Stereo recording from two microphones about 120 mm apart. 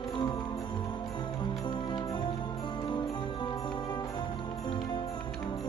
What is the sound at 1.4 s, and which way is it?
Music, 40° left (ahead or behind).